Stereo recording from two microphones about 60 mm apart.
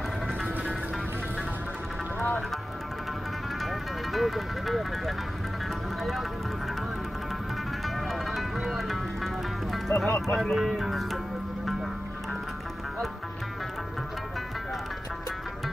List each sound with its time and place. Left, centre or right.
2.1 s music: left
3.6 s speech: centre
7.8 s music: centre
10.2 s speech: centre